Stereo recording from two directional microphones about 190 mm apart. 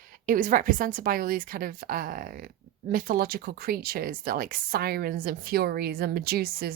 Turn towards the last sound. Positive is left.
turn(degrees=-55)  # may be behind; listen again after turning